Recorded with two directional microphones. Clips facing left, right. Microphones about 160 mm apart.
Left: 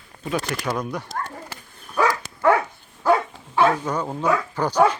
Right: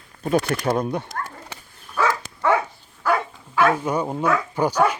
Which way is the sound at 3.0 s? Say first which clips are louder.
Left 3 dB; 25° left (ahead or behind).